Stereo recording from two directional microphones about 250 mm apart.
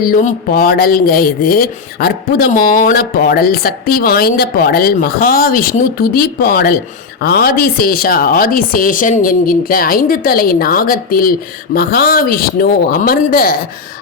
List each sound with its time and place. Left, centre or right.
0.0 s speech: left